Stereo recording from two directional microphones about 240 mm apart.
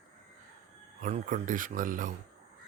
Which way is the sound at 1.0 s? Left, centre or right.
Right.